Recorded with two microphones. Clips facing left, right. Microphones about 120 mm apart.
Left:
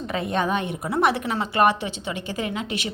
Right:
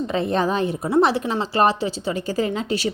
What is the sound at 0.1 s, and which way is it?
A woman's voice, 30° right (ahead or behind).